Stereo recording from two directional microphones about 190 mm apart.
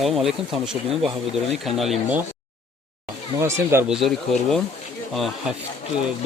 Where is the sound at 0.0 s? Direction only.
Centre (ahead or behind).